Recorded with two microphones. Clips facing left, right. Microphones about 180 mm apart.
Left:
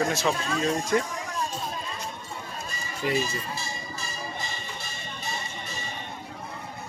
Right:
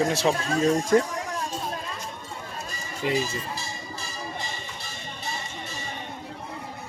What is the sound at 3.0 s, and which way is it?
Speech, 20° right (ahead or behind).